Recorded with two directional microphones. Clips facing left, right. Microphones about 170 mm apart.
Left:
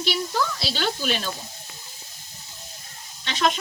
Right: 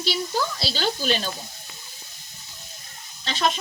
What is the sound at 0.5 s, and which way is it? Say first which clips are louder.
Speech: right 1 dB; 30° right (ahead or behind).